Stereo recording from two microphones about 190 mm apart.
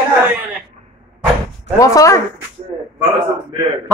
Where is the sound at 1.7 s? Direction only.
15° left (ahead or behind).